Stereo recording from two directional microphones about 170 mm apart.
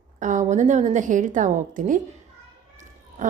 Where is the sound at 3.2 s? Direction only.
50° right (ahead or behind).